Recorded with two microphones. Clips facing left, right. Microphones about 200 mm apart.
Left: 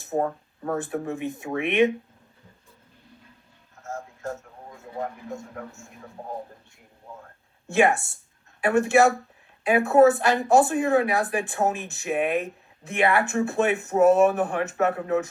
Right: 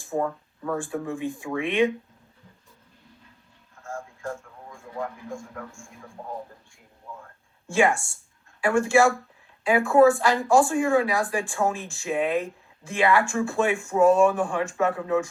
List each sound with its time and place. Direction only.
0.2 s speech: 35° left (ahead or behind)
0.8 s speech: 20° left (ahead or behind)
3.8 s music: 20° left (ahead or behind)
4.4 s a man's voice: 20° left (ahead or behind)
7.7 s speech: 20° left (ahead or behind)